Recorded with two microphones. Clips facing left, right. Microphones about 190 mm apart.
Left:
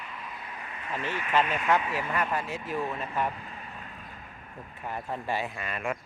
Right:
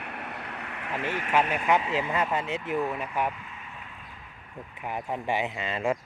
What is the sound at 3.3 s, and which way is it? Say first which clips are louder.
Vehicle: left 2 dB; 35° left (ahead or behind).